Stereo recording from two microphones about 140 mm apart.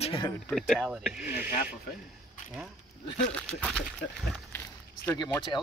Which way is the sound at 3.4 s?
10° left (ahead or behind).